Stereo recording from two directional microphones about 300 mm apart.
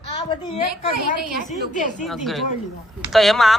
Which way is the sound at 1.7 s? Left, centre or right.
Left.